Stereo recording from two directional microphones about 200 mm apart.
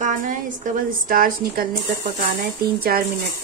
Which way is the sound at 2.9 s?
45° right (ahead or behind).